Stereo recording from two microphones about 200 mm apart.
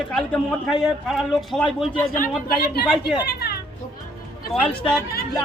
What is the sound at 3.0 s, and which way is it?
Speech, 55° left (ahead or behind).